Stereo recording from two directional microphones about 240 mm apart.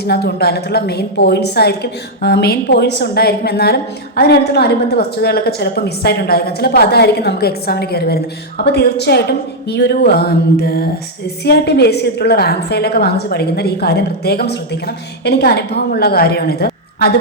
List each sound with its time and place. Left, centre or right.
0.0 s a woman's voice: left